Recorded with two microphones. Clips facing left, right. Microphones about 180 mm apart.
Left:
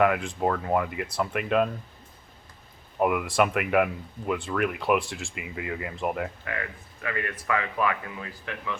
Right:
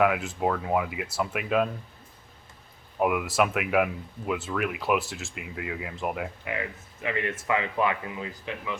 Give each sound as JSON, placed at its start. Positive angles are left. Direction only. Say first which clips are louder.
{"t": 0.0, "sound": "speech", "louder": "left 1 dB", "side_deg": -5}
{"t": 3.0, "sound": "speech", "louder": "left 1 dB", "side_deg": 0}
{"t": 6.4, "sound": "speech", "louder": "right 2 dB", "side_deg": -20}